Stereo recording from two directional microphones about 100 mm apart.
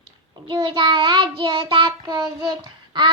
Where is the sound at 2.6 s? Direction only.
50° right (ahead or behind).